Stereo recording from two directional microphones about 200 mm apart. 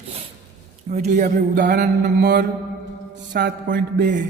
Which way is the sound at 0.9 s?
40° right (ahead or behind).